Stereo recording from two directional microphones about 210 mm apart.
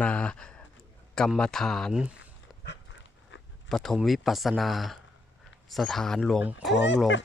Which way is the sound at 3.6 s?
Centre (ahead or behind).